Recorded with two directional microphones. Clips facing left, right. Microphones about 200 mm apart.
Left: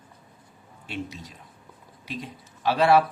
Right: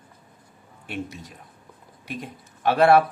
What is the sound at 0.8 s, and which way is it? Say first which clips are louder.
Speech: right 2 dB; 60° right (ahead or behind).